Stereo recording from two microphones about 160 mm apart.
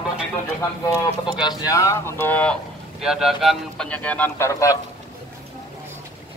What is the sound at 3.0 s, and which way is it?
Speech, 5° right (ahead or behind).